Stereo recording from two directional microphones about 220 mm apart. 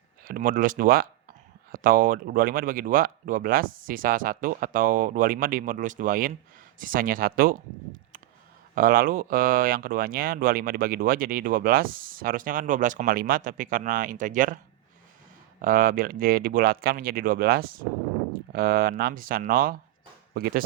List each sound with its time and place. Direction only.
0.3 s speech: 40° right (ahead or behind)
8.7 s speech: 40° right (ahead or behind)
15.6 s speech: 40° right (ahead or behind)